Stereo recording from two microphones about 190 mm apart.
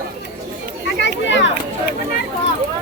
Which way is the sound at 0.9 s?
70° left (ahead or behind).